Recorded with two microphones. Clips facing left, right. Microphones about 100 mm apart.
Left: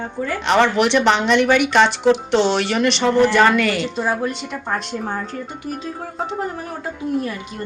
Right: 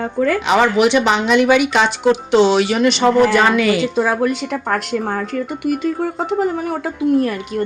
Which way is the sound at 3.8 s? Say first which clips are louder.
Right 5 dB; 90° right.